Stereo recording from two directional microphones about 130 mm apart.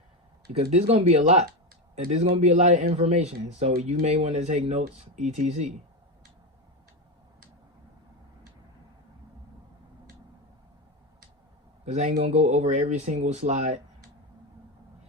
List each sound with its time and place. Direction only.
0.5 s speech: 55° right (ahead or behind)
11.9 s speech: 65° right (ahead or behind)